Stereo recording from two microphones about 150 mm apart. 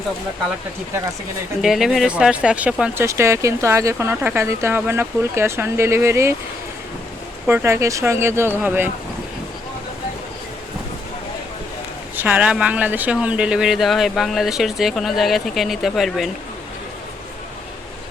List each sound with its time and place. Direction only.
1.6 s speech: centre (ahead or behind); by 6.3 s 20° right (ahead or behind)
7.4 s speech: 15° right (ahead or behind)
12.1 s speech: 10° right (ahead or behind)